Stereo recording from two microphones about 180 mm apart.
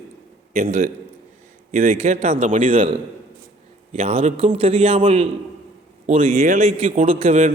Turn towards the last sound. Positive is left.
turn(degrees=-40)  # may be behind; listen again after turning